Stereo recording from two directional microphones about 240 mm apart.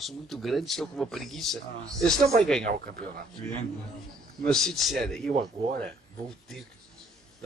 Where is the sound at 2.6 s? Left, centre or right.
Right.